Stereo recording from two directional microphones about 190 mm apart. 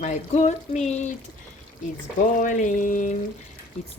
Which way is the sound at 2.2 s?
40° left (ahead or behind).